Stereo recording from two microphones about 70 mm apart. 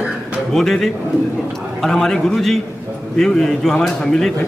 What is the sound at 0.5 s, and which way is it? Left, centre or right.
A man's voice, centre.